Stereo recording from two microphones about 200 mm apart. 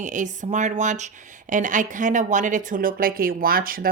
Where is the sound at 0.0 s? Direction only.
40° right (ahead or behind).